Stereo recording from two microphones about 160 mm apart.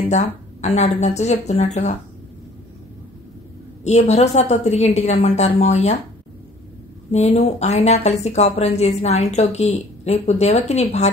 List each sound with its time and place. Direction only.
0.1 s speech: 45° left (ahead or behind)
3.8 s speech: 45° left (ahead or behind)
7.1 s speech: 45° left (ahead or behind)